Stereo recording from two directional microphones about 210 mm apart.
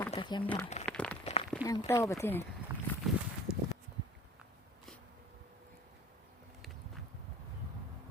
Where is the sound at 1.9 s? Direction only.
15° left (ahead or behind).